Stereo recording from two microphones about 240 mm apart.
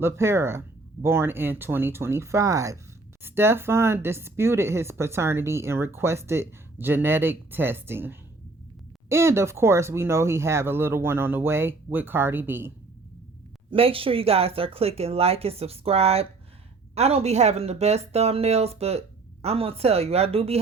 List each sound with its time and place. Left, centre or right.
0.0 s speech: centre
13.7 s speech: right